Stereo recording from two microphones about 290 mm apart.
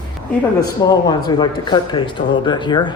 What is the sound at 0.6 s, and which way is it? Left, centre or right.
Speech, centre.